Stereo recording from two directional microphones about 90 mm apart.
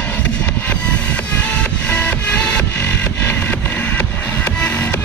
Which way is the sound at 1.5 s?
15° left (ahead or behind).